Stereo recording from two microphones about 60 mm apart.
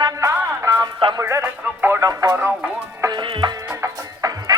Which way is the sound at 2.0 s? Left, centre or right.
Right.